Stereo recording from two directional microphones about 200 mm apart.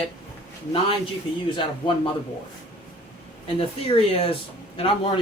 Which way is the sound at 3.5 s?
30° left (ahead or behind).